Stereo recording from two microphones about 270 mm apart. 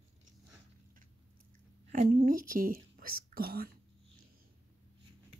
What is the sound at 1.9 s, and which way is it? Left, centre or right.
Speech, right.